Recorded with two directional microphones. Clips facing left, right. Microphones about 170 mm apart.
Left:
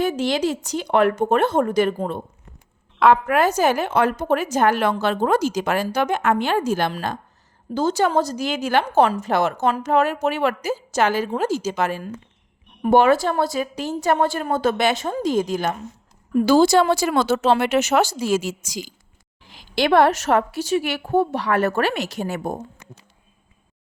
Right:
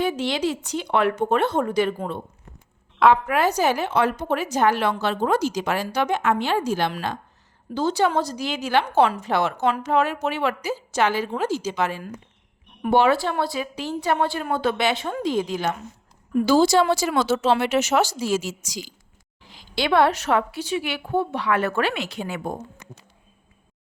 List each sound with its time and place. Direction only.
0.0 s a woman's voice: 45° left (ahead or behind)
16.5 s a woman's voice: 55° left (ahead or behind)